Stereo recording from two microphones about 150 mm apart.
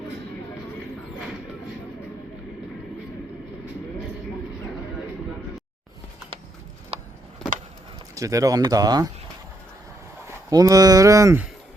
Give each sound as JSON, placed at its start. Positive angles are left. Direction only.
{"t": 6.9, "sound": "a sound", "side_deg": -40}
{"t": 8.1, "sound": "speech", "side_deg": -20}
{"t": 10.2, "sound": "speech", "side_deg": -25}